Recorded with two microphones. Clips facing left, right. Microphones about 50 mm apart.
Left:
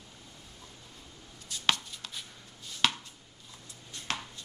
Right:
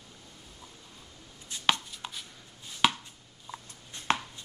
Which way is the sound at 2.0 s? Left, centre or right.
Right.